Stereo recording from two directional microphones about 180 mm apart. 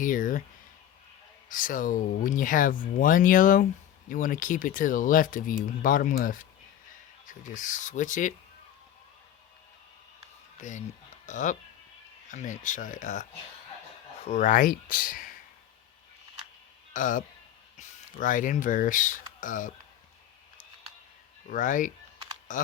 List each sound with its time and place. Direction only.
0.0 s speech: 45° left (ahead or behind)
1.5 s speech: 50° left (ahead or behind)
10.6 s speech: 45° left (ahead or behind)
14.3 s speech: 40° left (ahead or behind)
16.9 s speech: 45° left (ahead or behind)
21.4 s speech: 45° left (ahead or behind)